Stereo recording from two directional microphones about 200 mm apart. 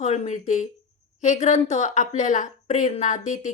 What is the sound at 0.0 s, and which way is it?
A woman's voice, 35° left (ahead or behind).